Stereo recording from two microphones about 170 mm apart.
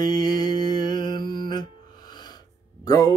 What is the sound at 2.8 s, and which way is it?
Speech, 20° left (ahead or behind).